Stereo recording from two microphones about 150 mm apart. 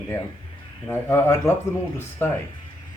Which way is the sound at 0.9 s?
15° left (ahead or behind).